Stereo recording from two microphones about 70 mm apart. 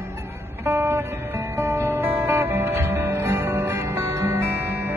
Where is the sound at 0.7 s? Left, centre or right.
Right.